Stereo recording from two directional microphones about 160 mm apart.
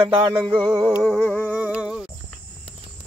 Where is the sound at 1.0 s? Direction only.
Centre (ahead or behind).